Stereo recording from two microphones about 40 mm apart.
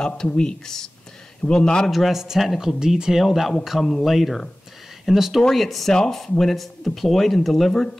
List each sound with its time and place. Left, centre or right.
0.0 s a man's voice: left
1.9 s speech: centre
5.4 s speech: centre